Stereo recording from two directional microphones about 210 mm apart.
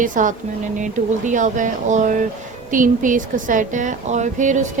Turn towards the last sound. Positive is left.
turn(degrees=-35)  # may be behind; listen again after turning